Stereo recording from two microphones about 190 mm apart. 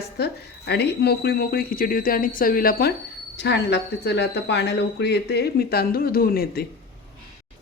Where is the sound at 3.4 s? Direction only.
65° left (ahead or behind).